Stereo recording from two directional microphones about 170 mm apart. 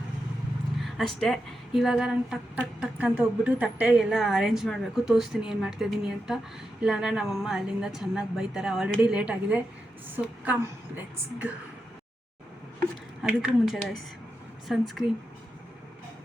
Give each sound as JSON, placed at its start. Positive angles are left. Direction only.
{"t": 0.8, "sound": "a woman's voice", "side_deg": 0}
{"t": 13.2, "sound": "speech", "side_deg": -5}